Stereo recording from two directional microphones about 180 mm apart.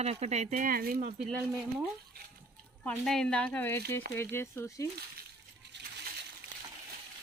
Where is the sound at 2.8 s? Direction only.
5° left (ahead or behind).